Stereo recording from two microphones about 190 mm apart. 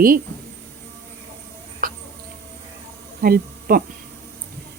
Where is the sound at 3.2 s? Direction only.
50° right (ahead or behind).